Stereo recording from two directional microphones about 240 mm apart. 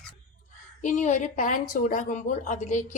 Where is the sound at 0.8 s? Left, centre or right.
Left.